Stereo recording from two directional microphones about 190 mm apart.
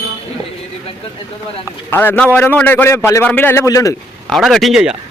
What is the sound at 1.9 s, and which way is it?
A man's voice, 10° left (ahead or behind).